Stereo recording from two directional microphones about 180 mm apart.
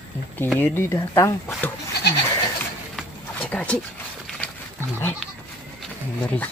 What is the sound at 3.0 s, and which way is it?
Horse, 5° left (ahead or behind).